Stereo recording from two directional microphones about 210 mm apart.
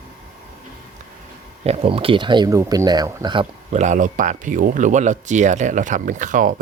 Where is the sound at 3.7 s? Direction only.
35° right (ahead or behind).